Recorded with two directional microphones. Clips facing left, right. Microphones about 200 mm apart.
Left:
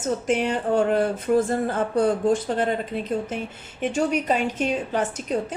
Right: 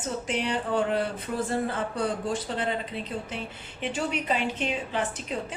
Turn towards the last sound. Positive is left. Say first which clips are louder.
# left 5 dB
turn(degrees=45)  # may be behind; listen again after turning